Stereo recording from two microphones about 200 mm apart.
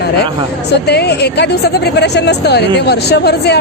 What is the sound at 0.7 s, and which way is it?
Speech, 55° left (ahead or behind).